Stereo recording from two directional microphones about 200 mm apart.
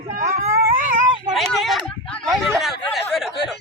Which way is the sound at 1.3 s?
Centre (ahead or behind).